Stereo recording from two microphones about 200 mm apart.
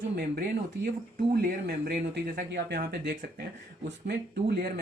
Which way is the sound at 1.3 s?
50° right (ahead or behind).